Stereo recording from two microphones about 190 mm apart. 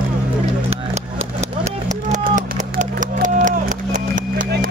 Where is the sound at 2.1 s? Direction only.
40° right (ahead or behind).